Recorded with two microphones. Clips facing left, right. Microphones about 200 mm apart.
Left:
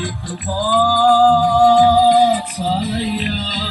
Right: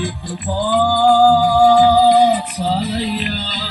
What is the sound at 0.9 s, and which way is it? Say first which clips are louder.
Music: right 1 dB; 15° right (ahead or behind).